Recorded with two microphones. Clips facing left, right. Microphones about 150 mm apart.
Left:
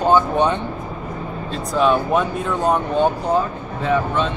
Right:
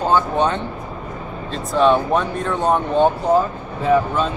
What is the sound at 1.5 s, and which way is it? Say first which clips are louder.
Speech: right 2 dB; 5° left (ahead or behind).